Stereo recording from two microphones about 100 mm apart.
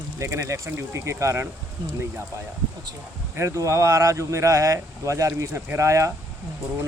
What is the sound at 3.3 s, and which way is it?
Speech, 30° right (ahead or behind).